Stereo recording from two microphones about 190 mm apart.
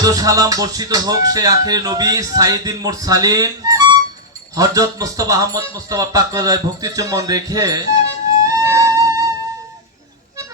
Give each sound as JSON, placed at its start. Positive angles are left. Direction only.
{"t": 0.0, "sound": "speech", "side_deg": -20}
{"t": 8.4, "sound": "music", "side_deg": -15}